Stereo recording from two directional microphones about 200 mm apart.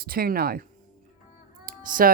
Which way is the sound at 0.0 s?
50° right (ahead or behind).